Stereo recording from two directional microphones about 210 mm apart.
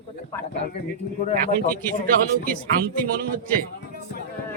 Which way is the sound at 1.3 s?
40° right (ahead or behind).